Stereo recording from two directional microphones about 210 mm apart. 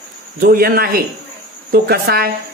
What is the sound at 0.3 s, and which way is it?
Speech, 45° right (ahead or behind).